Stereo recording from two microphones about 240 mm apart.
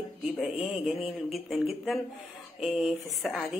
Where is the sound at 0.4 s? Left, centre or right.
Centre.